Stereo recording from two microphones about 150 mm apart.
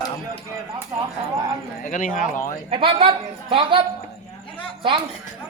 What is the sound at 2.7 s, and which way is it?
A woman's voice, 35° right (ahead or behind).